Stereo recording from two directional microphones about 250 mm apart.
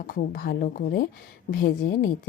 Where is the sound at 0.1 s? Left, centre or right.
Left.